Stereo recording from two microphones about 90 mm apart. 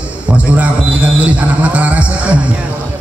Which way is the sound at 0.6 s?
15° right (ahead or behind).